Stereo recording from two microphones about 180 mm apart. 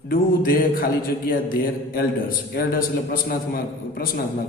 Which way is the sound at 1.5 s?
55° left (ahead or behind).